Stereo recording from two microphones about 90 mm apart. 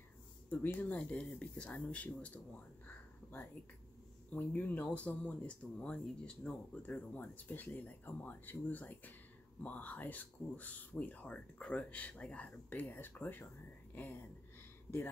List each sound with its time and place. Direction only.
0.5 s speech: 20° left (ahead or behind)
4.3 s speech: 20° left (ahead or behind)